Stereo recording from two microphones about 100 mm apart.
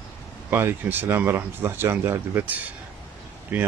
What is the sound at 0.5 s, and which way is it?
Speech, 20° right (ahead or behind).